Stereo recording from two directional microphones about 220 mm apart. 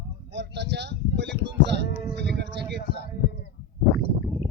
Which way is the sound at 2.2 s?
50° right (ahead or behind).